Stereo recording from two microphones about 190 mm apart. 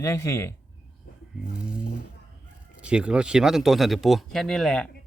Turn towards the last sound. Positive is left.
turn(degrees=5)  # may be behind; listen again after turning